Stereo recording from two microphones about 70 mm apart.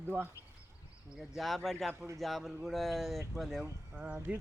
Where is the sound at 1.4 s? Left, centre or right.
Centre.